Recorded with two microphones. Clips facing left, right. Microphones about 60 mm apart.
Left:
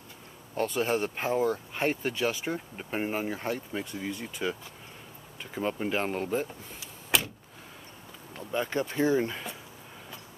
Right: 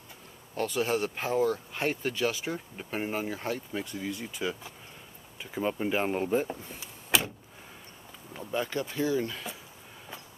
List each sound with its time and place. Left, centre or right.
0.6 s speech: centre
6.1 s speech: centre
7.1 s vehicle: centre
8.3 s a sound: centre
8.9 s speech: left